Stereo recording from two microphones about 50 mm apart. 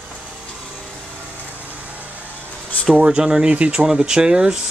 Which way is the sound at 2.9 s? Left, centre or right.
Right.